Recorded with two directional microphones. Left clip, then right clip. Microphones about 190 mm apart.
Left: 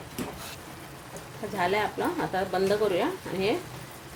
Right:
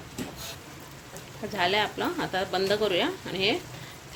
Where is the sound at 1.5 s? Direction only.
Centre (ahead or behind).